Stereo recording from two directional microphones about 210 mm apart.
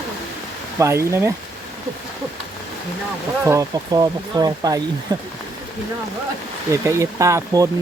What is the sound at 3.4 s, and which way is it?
Speech, 15° right (ahead or behind).